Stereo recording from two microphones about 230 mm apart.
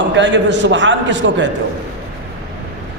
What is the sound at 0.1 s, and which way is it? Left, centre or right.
A man's voice, right.